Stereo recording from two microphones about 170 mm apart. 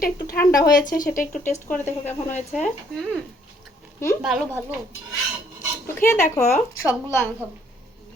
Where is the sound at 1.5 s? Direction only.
10° left (ahead or behind).